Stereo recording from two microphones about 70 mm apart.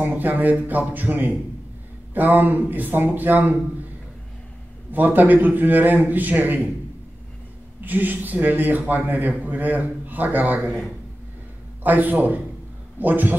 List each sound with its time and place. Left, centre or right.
0.0 s a man's voice: right
4.9 s a man's voice: right
7.8 s a man's voice: right
11.8 s a man's voice: right